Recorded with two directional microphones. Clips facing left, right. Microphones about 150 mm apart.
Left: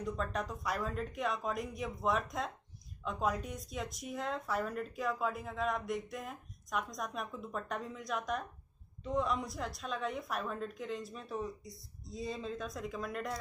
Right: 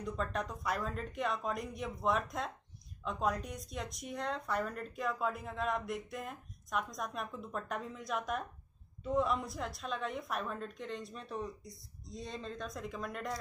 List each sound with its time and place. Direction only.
0.0 s speech: centre (ahead or behind)